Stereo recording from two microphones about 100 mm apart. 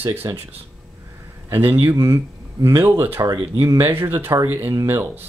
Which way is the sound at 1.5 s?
20° right (ahead or behind).